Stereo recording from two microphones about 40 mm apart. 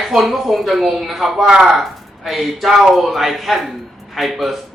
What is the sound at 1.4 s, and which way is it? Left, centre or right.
Speech, centre.